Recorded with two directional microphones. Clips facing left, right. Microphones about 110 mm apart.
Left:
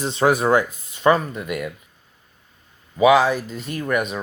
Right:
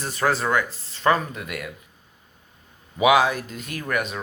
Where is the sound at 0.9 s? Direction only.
5° left (ahead or behind).